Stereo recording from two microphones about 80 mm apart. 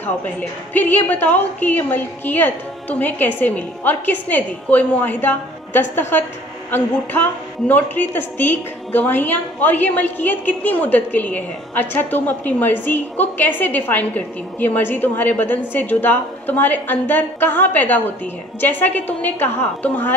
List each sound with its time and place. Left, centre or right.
0.0 s a woman's voice: left